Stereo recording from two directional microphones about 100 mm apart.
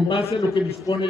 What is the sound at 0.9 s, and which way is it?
Speech, 50° left (ahead or behind).